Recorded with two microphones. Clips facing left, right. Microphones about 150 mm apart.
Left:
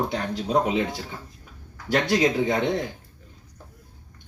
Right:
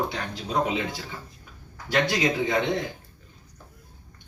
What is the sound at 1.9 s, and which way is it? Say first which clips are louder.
Speech: left 3 dB; 45° left (ahead or behind).